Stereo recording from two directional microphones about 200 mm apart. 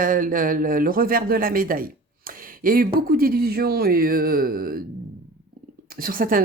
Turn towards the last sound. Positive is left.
turn(degrees=-45)  # may be behind; listen again after turning